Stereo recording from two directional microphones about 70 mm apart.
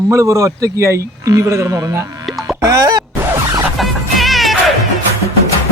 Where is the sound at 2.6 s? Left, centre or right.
Right.